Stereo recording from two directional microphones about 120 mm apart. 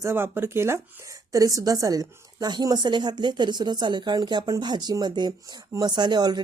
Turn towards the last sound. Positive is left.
turn(degrees=-35)  # may be behind; listen again after turning